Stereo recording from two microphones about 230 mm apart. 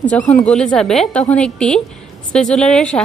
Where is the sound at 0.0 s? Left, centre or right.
Centre.